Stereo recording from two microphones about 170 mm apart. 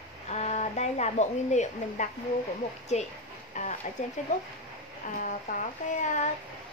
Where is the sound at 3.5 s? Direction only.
45° left (ahead or behind).